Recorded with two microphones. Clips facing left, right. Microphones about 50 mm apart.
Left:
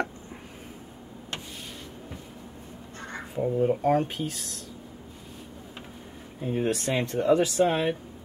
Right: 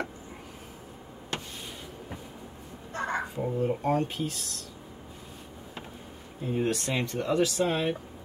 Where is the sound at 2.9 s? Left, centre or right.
Right.